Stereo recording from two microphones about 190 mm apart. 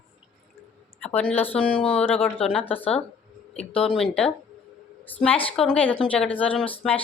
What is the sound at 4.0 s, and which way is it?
A woman's voice, 5° left (ahead or behind).